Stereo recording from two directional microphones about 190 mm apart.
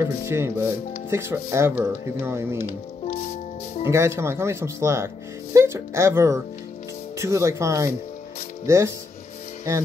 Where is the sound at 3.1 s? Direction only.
35° left (ahead or behind).